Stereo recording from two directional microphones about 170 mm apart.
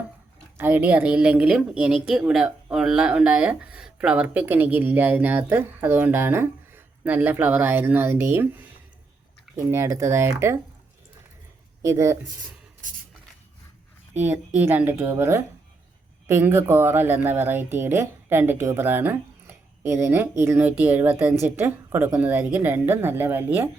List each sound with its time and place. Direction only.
0.5 s a woman's voice: 10° right (ahead or behind)
11.8 s a woman's voice: 15° right (ahead or behind)
12.8 s a sound: 50° right (ahead or behind)
14.2 s a woman's voice: 10° right (ahead or behind)